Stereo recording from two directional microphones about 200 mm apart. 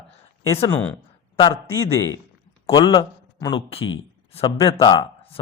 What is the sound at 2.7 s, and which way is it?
A man's voice, 20° left (ahead or behind).